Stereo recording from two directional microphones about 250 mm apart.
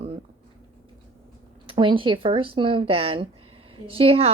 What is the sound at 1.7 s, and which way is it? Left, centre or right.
Speech, centre.